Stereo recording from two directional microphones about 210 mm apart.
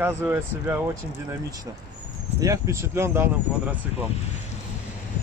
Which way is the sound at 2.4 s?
15° right (ahead or behind).